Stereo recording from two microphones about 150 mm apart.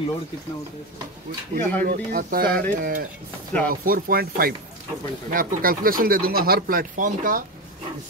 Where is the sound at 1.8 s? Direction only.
80° right.